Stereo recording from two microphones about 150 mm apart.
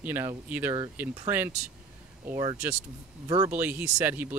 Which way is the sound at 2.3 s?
30° right (ahead or behind).